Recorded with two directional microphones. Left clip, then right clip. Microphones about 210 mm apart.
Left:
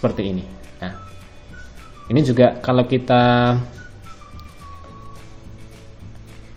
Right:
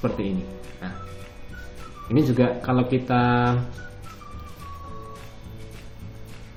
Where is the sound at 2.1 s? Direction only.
45° left (ahead or behind).